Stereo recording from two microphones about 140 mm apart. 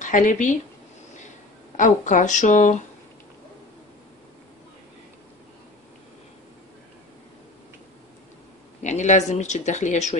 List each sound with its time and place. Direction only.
0.0 s speech: 65° left (ahead or behind)
1.8 s speech: 65° left (ahead or behind)
8.8 s a sound: 55° left (ahead or behind)
9.3 s speech: 55° left (ahead or behind)